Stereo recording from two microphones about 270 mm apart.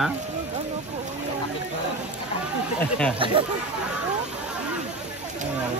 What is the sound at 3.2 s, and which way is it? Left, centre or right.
Speech, centre.